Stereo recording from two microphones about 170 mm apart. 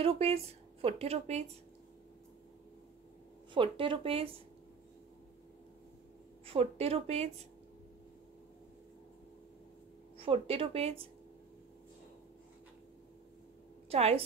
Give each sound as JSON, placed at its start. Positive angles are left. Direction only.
{"t": 0.0, "sound": "speech", "side_deg": -35}
{"t": 3.5, "sound": "speech", "side_deg": -30}
{"t": 6.4, "sound": "speech", "side_deg": -35}
{"t": 10.1, "sound": "speech", "side_deg": -35}
{"t": 13.8, "sound": "a woman's voice", "side_deg": -35}